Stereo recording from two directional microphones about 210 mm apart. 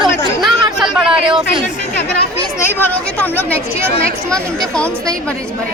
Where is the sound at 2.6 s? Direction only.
10° left (ahead or behind).